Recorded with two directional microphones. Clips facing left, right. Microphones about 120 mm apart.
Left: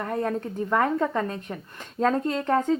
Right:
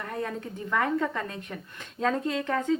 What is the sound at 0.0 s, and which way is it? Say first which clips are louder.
Speech: left 6 dB; 40° left (ahead or behind).